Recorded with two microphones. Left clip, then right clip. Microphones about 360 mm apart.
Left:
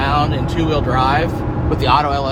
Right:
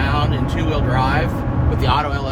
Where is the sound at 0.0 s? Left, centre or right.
Left.